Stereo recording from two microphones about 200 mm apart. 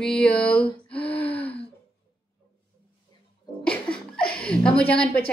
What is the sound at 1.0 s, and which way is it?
Gasp, 10° left (ahead or behind).